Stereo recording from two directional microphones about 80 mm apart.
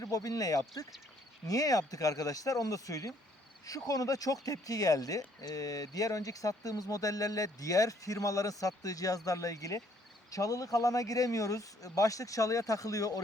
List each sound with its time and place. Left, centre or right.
0.0 s speech: left